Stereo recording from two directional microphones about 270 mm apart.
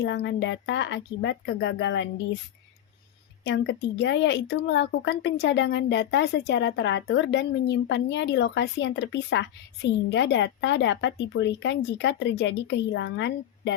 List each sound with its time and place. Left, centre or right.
0.0 s speech: left
3.4 s speech: left